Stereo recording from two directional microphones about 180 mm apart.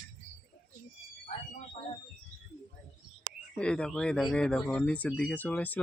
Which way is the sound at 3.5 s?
5° left (ahead or behind).